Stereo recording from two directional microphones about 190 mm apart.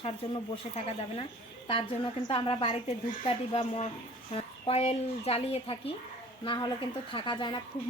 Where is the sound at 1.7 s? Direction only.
25° left (ahead or behind).